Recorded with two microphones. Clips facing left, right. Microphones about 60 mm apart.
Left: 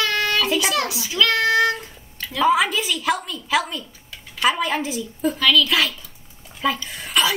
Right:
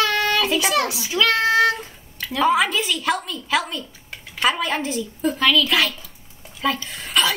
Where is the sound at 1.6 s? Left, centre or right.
Centre.